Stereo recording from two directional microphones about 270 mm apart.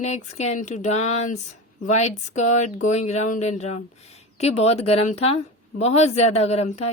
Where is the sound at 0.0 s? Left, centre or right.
Left.